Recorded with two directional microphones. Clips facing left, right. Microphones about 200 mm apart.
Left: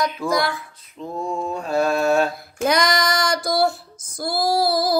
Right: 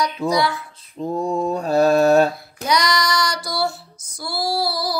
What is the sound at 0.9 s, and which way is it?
Mantra, 35° right (ahead or behind).